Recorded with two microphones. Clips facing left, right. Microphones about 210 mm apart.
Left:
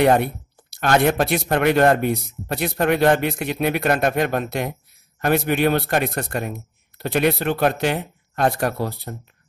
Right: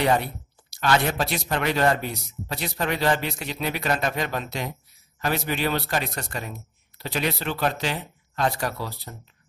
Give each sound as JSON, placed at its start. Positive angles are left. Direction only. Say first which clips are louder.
{"t": 0.0, "sound": "speech", "louder": "left 6 dB", "side_deg": 55}